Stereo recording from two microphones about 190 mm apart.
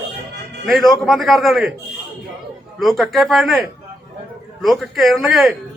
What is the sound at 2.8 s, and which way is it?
A man's voice, centre (ahead or behind).